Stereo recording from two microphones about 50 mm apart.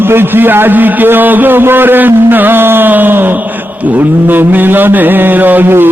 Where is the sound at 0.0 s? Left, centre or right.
Right.